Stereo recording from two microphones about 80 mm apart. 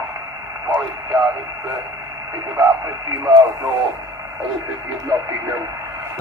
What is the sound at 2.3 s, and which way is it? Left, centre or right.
Speech, right.